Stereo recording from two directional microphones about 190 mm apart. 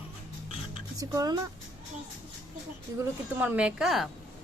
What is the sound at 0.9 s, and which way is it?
Speech, 20° right (ahead or behind).